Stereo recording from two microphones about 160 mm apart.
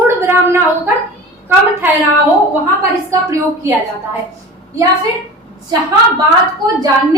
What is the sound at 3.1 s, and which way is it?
Speech, 20° right (ahead or behind).